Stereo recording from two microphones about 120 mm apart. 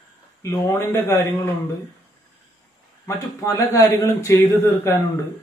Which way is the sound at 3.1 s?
25° left (ahead or behind).